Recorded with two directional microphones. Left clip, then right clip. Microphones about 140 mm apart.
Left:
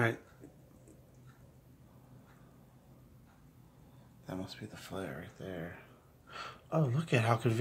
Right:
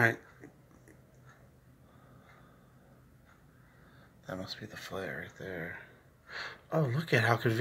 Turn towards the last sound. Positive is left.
turn(degrees=10)  # may be behind; listen again after turning